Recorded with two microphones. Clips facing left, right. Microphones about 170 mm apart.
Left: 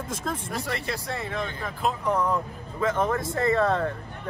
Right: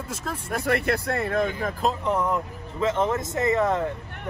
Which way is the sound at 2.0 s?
20° right (ahead or behind).